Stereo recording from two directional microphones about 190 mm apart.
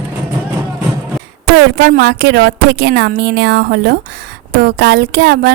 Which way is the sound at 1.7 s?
50° right (ahead or behind).